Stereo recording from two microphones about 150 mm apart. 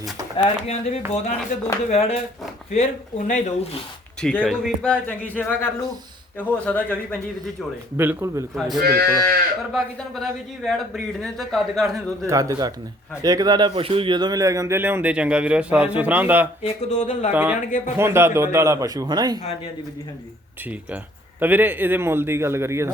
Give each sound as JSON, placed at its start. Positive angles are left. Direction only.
{"t": 0.4, "sound": "speech", "side_deg": 45}
{"t": 3.2, "sound": "speech", "side_deg": 55}
{"t": 4.2, "sound": "a man's voice", "side_deg": 5}
{"t": 7.9, "sound": "a man's voice", "side_deg": -15}
{"t": 8.5, "sound": "speech", "side_deg": 0}
{"t": 8.8, "sound": "speech", "side_deg": -85}
{"t": 9.7, "sound": "speech", "side_deg": 0}
{"t": 12.3, "sound": "a man's voice", "side_deg": -25}
{"t": 16.6, "sound": "speech", "side_deg": 50}
{"t": 17.3, "sound": "a man's voice", "side_deg": -10}
{"t": 17.7, "sound": "a man's voice", "side_deg": 55}
{"t": 17.9, "sound": "a man's voice", "side_deg": -15}
{"t": 21.4, "sound": "a man's voice", "side_deg": -10}